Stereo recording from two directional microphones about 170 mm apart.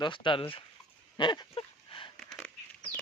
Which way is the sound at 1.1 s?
25° left (ahead or behind).